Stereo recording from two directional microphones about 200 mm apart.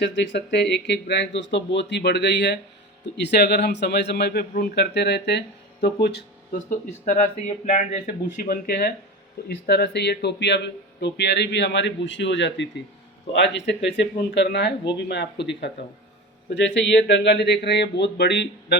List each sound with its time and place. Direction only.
0.0 s speech: 60° left (ahead or behind)
6.6 s speech: 40° left (ahead or behind); by 18.8 s 60° left (ahead or behind)